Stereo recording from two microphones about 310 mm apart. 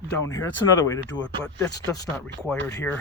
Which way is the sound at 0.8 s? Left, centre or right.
Centre.